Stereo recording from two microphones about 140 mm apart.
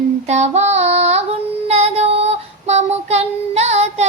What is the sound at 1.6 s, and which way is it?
Child singing, 50° right (ahead or behind).